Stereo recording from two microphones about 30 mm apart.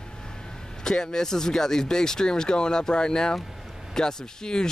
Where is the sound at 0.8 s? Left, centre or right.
Left.